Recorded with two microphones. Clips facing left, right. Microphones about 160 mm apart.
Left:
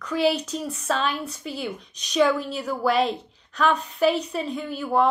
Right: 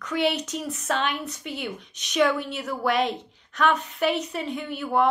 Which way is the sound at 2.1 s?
30° left (ahead or behind).